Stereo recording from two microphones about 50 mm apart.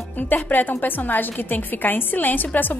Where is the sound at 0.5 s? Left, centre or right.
Left.